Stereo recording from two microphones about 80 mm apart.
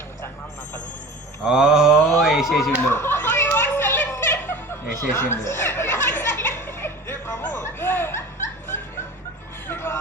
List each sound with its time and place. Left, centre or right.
1.5 s mantra: centre
2.2 s speech: centre
2.9 s a sound: left
9.6 s hubbub: left